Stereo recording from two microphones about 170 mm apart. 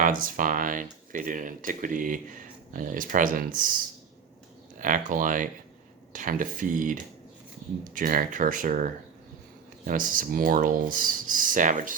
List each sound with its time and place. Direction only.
0.0 s speech: 55° right (ahead or behind)
4.8 s speech: 50° right (ahead or behind)